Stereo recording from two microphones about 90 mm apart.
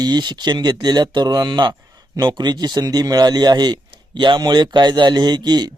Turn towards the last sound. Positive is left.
turn(degrees=-50)  # may be behind; listen again after turning